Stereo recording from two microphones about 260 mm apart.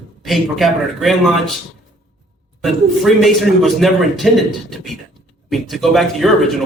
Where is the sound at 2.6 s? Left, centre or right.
Centre.